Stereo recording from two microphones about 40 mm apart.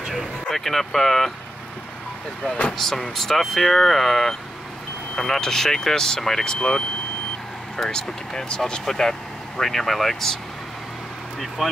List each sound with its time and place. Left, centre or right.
0.5 s speech: centre
2.4 s speech: left
3.2 s speech: centre
7.9 s speech: centre